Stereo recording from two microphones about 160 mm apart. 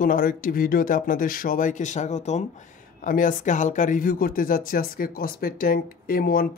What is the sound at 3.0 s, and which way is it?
Speech, 55° left (ahead or behind).